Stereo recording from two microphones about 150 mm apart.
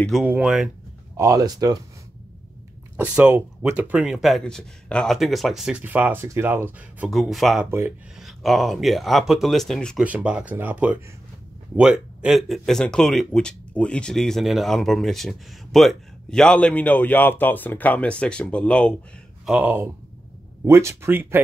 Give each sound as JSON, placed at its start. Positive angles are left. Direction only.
{"t": 0.1, "sound": "speech", "side_deg": -5}
{"t": 1.1, "sound": "speech", "side_deg": -20}
{"t": 3.3, "sound": "speech", "side_deg": -15}
{"t": 7.1, "sound": "speech", "side_deg": 0}
{"t": 10.0, "sound": "speech", "side_deg": -10}
{"t": 19.4, "sound": "speech", "side_deg": -10}